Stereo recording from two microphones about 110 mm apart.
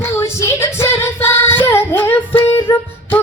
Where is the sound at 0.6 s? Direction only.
25° left (ahead or behind).